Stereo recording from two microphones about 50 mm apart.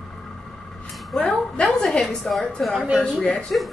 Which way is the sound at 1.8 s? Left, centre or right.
Left.